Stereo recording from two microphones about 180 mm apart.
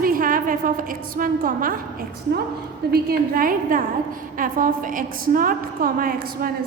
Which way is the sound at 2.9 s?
55° right (ahead or behind).